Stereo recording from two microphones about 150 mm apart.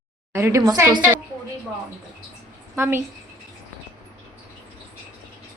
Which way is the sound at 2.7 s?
15° right (ahead or behind).